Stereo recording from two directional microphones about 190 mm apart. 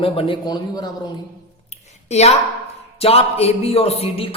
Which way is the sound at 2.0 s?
35° left (ahead or behind).